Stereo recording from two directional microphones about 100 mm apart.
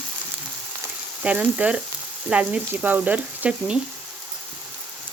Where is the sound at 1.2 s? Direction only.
10° right (ahead or behind).